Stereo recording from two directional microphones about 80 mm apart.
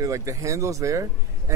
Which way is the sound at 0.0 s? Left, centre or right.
Right.